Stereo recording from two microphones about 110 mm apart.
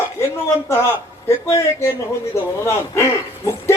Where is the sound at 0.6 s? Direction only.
25° left (ahead or behind).